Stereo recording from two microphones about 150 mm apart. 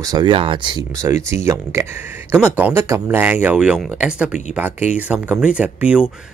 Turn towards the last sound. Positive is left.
turn(degrees=-10)  # may be behind; listen again after turning